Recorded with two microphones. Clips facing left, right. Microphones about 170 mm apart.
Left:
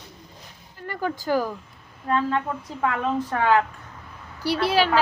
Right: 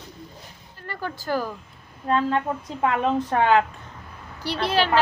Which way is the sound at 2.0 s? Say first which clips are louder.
Right 1 dB; 25° right (ahead or behind).